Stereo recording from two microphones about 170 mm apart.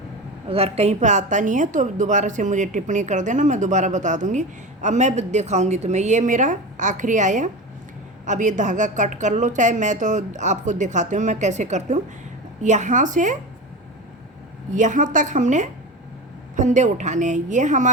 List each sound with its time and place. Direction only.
0.4 s a woman's voice: 35° right (ahead or behind)
14.8 s a woman's voice: 50° right (ahead or behind)